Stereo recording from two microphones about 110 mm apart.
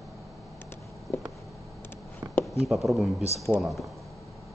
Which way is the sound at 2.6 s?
Centre (ahead or behind).